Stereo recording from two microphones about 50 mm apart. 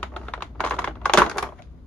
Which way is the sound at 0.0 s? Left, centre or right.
Left.